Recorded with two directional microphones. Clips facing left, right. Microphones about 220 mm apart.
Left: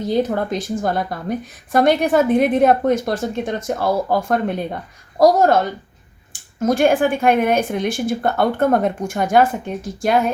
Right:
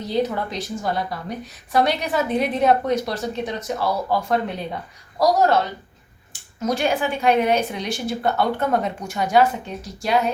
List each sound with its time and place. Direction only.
0.1 s speech: 50° left (ahead or behind)